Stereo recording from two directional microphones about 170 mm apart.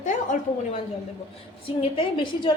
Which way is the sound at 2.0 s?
30° left (ahead or behind).